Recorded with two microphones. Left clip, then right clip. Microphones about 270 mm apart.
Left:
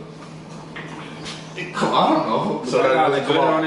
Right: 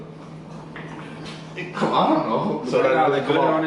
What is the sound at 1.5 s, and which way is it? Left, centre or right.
Speech, centre.